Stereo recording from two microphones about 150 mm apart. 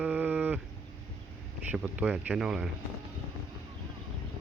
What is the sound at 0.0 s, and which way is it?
Livestock, 10° right (ahead or behind).